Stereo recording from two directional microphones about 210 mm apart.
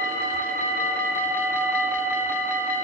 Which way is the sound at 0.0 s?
40° right (ahead or behind).